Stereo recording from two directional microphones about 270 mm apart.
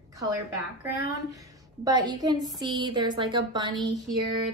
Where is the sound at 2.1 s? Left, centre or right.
Centre.